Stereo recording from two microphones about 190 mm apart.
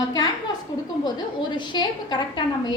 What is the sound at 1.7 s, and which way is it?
Speech, 25° left (ahead or behind).